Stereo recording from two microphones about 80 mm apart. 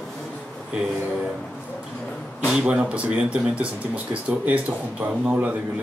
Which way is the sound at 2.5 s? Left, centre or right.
Centre.